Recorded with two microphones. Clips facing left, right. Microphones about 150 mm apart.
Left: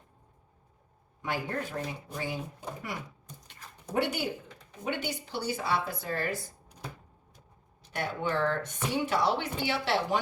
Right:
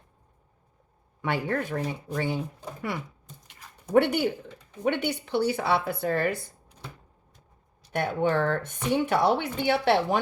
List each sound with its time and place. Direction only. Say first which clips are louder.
1.2 s speech: right 5 dB; 65° right (ahead or behind)
3.9 s speech: right 8 dB; 60° right (ahead or behind)
7.9 s speech: right 6 dB; 55° right (ahead or behind)